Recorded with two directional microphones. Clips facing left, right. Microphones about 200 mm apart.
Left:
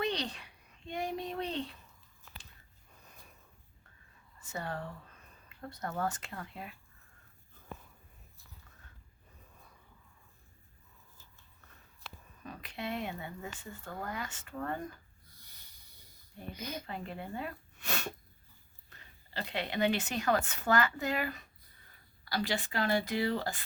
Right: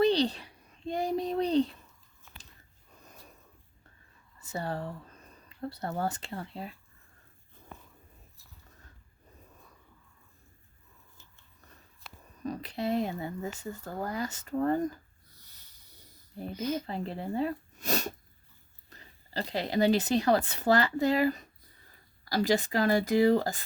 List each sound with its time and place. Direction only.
0.0 s a sound: 35° right (ahead or behind)
4.4 s speech: 35° right (ahead or behind)
12.4 s speech: 40° right (ahead or behind)
16.4 s speech: 35° right (ahead or behind)